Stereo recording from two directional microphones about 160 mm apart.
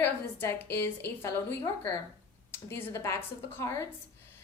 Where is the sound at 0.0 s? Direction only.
15° left (ahead or behind).